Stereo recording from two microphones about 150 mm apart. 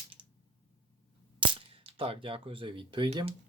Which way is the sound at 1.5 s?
35° right (ahead or behind).